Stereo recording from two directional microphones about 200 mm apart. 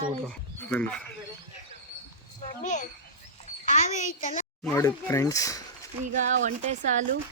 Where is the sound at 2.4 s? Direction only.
35° left (ahead or behind).